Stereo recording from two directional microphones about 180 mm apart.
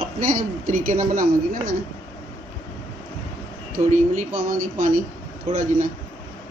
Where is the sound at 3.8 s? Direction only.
45° right (ahead or behind).